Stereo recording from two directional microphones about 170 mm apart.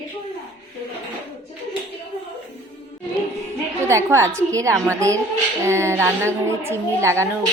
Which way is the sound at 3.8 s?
15° right (ahead or behind).